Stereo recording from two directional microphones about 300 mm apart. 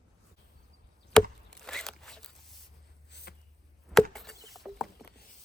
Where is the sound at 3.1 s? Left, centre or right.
Left.